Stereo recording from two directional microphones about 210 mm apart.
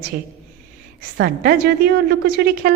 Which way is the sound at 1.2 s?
50° right (ahead or behind).